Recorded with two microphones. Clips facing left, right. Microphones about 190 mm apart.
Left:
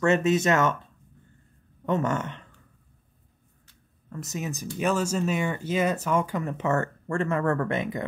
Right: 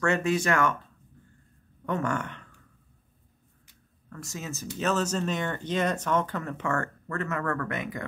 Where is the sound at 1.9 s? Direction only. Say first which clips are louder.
Left 3 dB; 20° left (ahead or behind).